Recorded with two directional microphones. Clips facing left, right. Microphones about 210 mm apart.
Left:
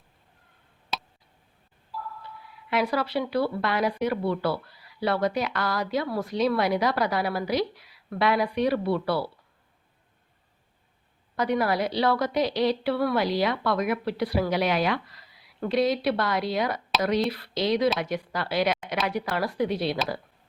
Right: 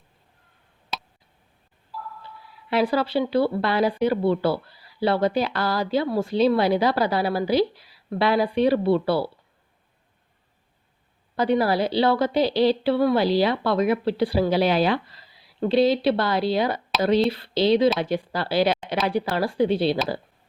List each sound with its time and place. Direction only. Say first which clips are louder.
0.9 s tick: even; centre (ahead or behind)
1.9 s a sound: even; centre (ahead or behind)
2.6 s speech: right 4 dB; 30° right (ahead or behind)
11.3 s speech: right 4 dB; 30° right (ahead or behind)